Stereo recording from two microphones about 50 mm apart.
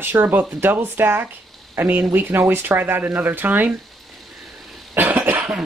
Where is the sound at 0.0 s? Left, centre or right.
Right.